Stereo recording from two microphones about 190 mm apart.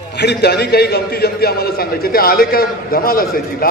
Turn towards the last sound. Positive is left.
turn(degrees=50)  # may be behind; listen again after turning